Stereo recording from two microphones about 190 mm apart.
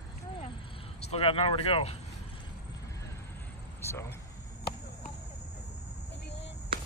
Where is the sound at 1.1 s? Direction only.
30° left (ahead or behind).